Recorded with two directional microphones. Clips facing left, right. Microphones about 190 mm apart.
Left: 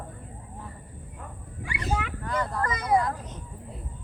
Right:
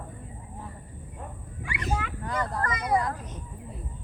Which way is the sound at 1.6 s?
35° left (ahead or behind).